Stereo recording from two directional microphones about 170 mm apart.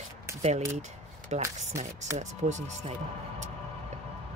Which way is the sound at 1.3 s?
40° right (ahead or behind).